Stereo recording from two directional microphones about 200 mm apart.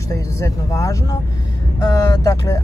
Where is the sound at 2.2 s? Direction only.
15° left (ahead or behind).